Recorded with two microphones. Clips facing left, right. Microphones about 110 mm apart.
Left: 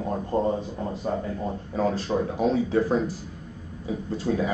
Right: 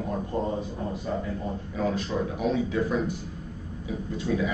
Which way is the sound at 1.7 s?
35° left (ahead or behind).